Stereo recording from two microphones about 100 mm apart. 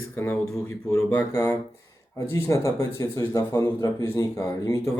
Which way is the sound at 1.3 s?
30° left (ahead or behind).